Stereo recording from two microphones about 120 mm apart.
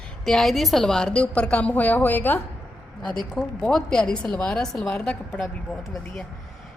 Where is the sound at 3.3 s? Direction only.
5° left (ahead or behind).